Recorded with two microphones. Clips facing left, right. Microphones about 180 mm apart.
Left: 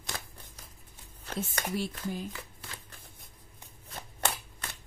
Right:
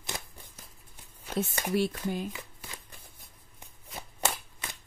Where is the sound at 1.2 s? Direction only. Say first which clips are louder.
Right 5 dB; 5° right (ahead or behind).